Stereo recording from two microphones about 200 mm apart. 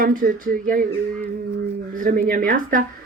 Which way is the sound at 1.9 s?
45° right (ahead or behind).